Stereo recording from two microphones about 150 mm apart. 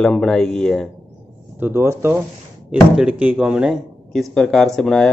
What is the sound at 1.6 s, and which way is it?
Speech, 15° right (ahead or behind).